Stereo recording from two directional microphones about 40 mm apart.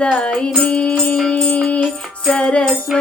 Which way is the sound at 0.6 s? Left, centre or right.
Left.